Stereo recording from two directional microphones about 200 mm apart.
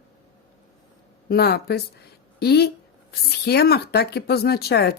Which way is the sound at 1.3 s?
55° left (ahead or behind).